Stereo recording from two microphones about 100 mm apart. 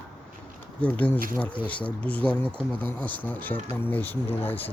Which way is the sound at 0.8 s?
15° left (ahead or behind).